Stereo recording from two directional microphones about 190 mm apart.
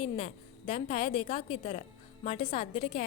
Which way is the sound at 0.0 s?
35° left (ahead or behind).